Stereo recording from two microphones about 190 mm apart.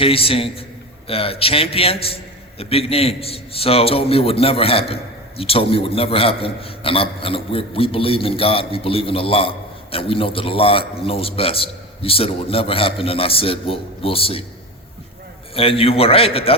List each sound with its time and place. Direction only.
0.0 s a man's voice: 30° left (ahead or behind)
15.5 s a man's voice: 30° left (ahead or behind)